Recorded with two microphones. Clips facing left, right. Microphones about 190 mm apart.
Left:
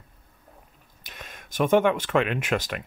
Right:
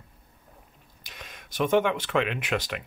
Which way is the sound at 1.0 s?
50° left (ahead or behind).